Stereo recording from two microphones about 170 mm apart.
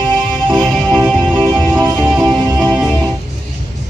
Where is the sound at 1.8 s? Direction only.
20° right (ahead or behind).